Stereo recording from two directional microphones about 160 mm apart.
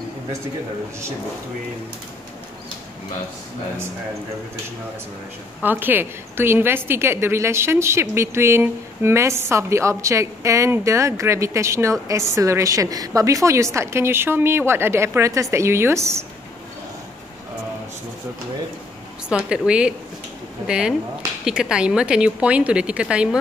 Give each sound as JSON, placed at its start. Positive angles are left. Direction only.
{"t": 5.6, "sound": "a woman's voice", "side_deg": -10}
{"t": 19.2, "sound": "a woman's voice", "side_deg": -5}